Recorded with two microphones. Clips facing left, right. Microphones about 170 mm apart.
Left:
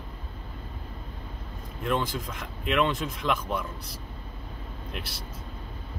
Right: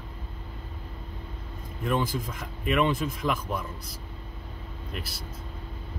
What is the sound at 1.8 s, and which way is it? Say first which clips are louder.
Speech: right 1 dB; 5° right (ahead or behind).